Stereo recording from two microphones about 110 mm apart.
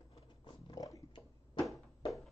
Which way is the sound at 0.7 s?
40° left (ahead or behind).